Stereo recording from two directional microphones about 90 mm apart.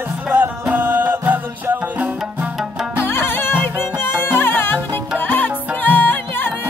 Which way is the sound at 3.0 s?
25° left (ahead or behind).